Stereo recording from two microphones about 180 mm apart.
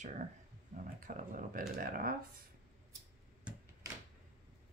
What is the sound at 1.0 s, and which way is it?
Speech, 45° right (ahead or behind).